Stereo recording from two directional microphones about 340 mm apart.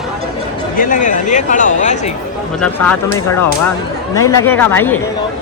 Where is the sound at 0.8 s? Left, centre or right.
Left.